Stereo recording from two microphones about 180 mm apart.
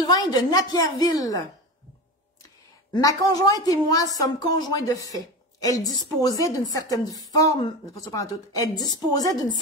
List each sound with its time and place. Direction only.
0.0 s a woman's voice: 20° left (ahead or behind)
2.9 s a woman's voice: 20° left (ahead or behind)